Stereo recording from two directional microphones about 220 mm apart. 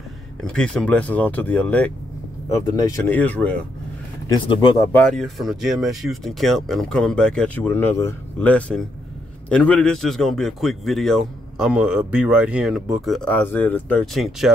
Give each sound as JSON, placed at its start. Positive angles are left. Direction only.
{"t": 0.4, "sound": "speech", "side_deg": 5}
{"t": 4.3, "sound": "speech", "side_deg": 20}
{"t": 4.9, "sound": "a man's voice", "side_deg": 5}